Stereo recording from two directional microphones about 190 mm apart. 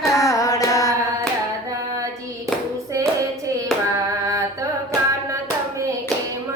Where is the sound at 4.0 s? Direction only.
20° right (ahead or behind).